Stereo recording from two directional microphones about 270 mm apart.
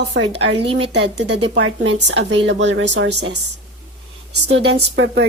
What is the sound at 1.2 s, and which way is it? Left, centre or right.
Speech, right.